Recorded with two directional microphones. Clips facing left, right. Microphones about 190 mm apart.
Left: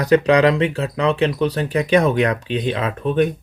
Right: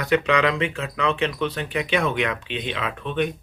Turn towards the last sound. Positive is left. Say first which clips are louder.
# left 7 dB
turn(degrees=40)  # may be behind; listen again after turning